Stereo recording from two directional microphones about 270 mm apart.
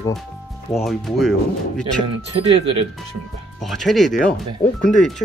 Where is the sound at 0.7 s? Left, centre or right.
Centre.